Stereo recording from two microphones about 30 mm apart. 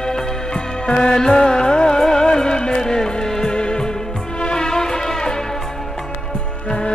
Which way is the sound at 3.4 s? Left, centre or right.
Left.